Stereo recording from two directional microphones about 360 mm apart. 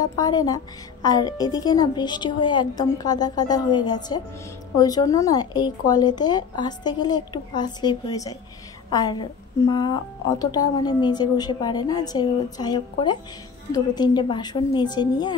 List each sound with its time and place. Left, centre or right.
0.0 s a woman's voice: centre